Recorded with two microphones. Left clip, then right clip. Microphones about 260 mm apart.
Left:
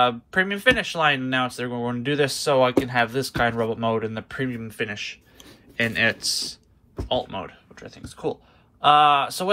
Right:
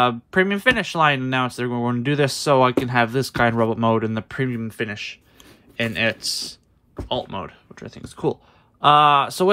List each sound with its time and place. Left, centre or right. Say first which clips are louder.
0.0 s speech: right 2 dB; right